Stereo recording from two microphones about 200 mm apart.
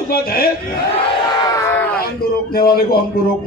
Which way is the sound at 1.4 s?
15° left (ahead or behind).